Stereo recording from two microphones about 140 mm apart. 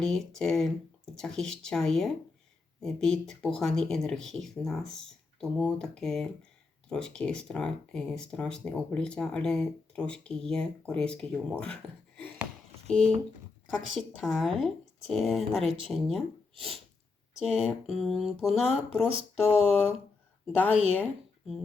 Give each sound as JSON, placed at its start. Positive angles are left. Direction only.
{"t": 0.0, "sound": "speech", "side_deg": 5}
{"t": 13.7, "sound": "speech", "side_deg": 0}
{"t": 19.0, "sound": "speech", "side_deg": -45}
{"t": 21.0, "sound": "speech", "side_deg": -5}